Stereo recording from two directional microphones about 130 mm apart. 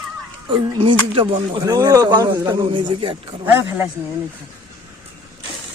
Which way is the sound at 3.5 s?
15° right (ahead or behind).